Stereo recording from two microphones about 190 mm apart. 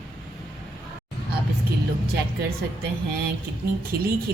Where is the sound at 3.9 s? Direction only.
55° right (ahead or behind).